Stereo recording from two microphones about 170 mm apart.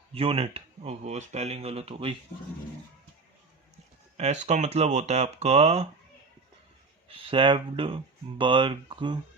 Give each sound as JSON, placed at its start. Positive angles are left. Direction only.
{"t": 0.1, "sound": "speech", "side_deg": -35}
{"t": 4.2, "sound": "speech", "side_deg": -40}
{"t": 7.1, "sound": "speech", "side_deg": -30}